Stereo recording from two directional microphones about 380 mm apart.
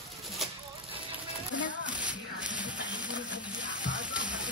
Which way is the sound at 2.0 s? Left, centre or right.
Centre.